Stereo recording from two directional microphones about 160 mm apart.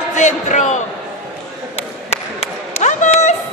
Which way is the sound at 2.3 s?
45° left (ahead or behind).